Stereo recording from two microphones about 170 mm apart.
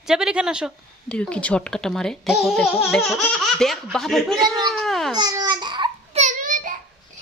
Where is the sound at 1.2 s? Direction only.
5° left (ahead or behind).